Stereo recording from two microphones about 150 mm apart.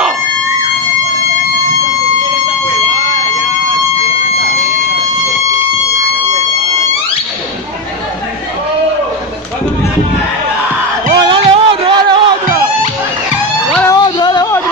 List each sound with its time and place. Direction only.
11.2 s music: 35° right (ahead or behind)
13.8 s music: 25° left (ahead or behind)